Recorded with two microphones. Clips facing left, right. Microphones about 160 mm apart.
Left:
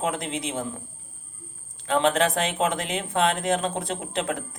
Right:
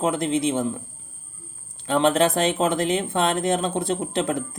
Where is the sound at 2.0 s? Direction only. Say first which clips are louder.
Right 3 dB; 35° right (ahead or behind).